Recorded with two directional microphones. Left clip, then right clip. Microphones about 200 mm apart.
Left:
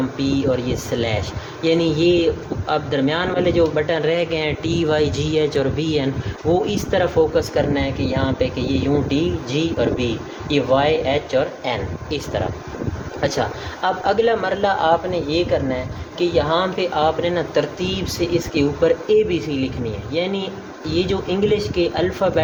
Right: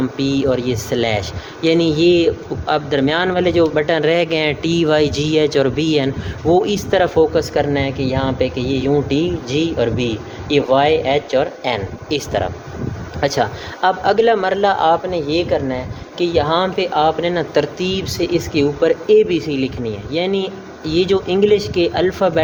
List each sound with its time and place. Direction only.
0.2 s a man's voice: 55° right (ahead or behind)